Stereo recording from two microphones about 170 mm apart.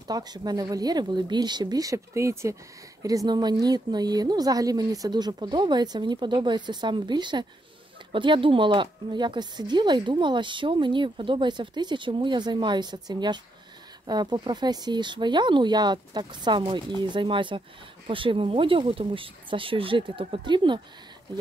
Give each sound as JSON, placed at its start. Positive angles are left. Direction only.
{"t": 0.1, "sound": "speech", "side_deg": -25}